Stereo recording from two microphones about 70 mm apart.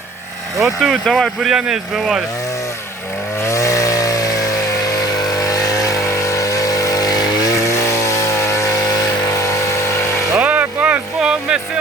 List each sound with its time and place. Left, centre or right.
0.8 s speech: centre
3.4 s chainsaw: left
9.4 s vehicle: left
10.3 s vehicle: right
11.2 s a sound: centre